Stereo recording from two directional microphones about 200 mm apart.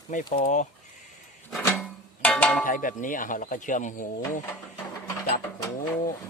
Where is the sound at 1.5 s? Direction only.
5° left (ahead or behind).